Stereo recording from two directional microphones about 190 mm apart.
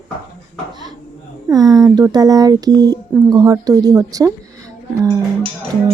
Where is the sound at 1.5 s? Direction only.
20° right (ahead or behind).